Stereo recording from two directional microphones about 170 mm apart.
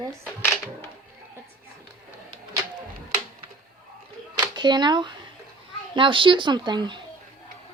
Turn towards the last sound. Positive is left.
turn(degrees=-25)  # may be behind; listen again after turning